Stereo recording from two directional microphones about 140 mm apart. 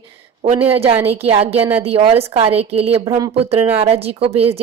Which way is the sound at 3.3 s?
45° right (ahead or behind).